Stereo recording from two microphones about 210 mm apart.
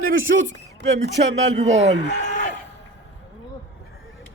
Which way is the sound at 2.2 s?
35° left (ahead or behind).